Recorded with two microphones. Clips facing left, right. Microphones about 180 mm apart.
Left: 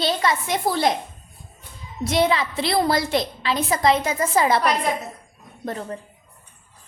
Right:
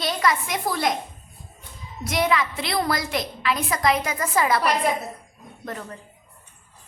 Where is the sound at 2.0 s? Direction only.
30° left (ahead or behind).